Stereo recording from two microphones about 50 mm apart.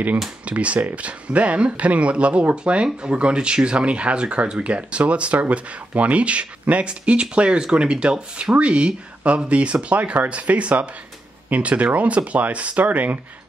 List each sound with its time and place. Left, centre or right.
0.5 s speech: right